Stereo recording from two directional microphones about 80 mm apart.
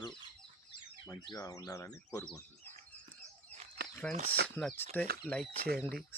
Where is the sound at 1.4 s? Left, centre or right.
Left.